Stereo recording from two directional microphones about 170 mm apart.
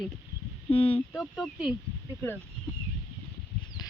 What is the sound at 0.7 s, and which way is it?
Speech, 35° left (ahead or behind).